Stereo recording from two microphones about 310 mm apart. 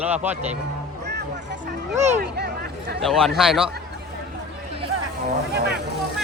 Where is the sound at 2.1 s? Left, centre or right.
Right.